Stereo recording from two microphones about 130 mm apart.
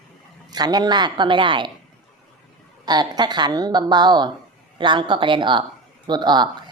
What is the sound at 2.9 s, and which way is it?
Speech, 35° right (ahead or behind).